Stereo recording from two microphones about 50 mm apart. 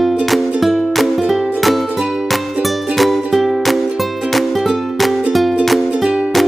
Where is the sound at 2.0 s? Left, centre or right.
Centre.